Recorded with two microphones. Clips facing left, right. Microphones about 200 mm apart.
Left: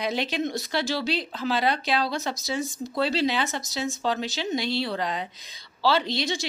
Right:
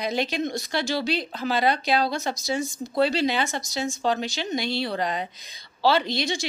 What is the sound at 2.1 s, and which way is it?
Speech, centre (ahead or behind).